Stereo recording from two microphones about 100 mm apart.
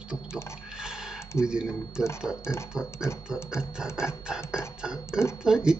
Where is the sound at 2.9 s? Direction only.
30° left (ahead or behind).